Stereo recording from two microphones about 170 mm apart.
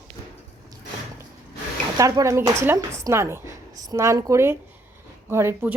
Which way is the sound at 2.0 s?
20° right (ahead or behind).